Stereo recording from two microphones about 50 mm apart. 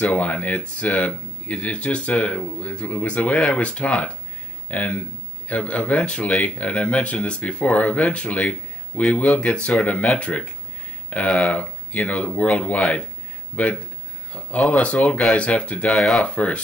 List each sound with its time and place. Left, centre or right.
0.0 s speech: left
14.3 s speech: left
16.0 s speech: centre
16.3 s speech: left